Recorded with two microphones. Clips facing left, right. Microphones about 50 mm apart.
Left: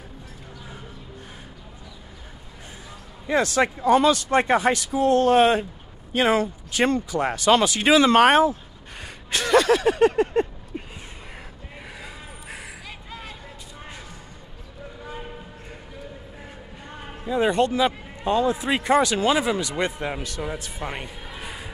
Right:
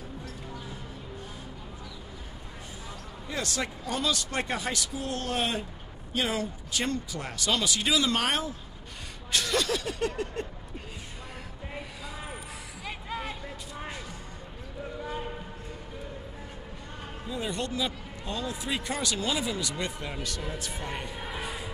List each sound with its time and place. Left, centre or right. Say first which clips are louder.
3.4 s speech: left 13 dB; left
12.8 s a sound: right 3 dB; centre
17.3 s speech: left 12 dB; left
18.9 s speech: left 14 dB; left
19.6 s speech: left 8 dB; left
20.2 s speech: left 5 dB; left
21.2 s music: right 2 dB; centre